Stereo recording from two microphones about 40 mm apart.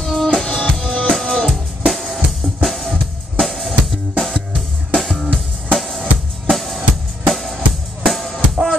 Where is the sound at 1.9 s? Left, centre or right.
Centre.